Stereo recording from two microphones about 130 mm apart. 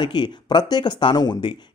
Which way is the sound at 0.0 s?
35° left (ahead or behind).